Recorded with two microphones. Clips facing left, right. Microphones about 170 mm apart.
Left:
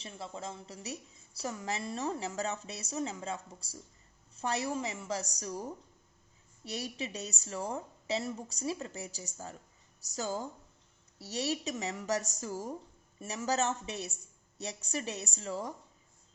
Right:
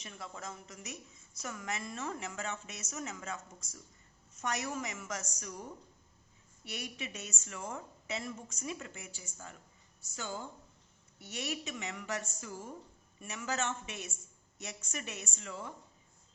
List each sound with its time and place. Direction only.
0.0 s a woman's voice: 30° left (ahead or behind)